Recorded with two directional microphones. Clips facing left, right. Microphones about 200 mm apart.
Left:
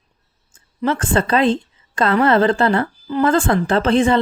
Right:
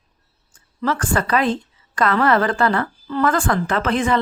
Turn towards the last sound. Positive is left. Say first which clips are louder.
# left 4 dB
turn(degrees=30)  # may be behind; listen again after turning